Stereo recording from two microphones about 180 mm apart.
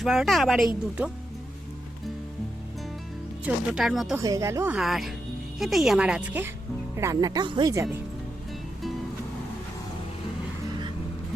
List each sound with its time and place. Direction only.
0.0 s speech: centre (ahead or behind)
3.4 s speech: 5° right (ahead or behind)
4.2 s speech: 20° right (ahead or behind)
4.7 s speech: centre (ahead or behind); by 7.9 s 20° right (ahead or behind)